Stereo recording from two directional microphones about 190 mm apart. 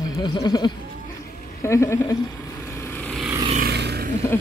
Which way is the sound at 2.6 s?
15° left (ahead or behind).